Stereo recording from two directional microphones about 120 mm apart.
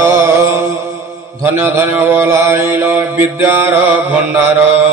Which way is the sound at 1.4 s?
20° right (ahead or behind).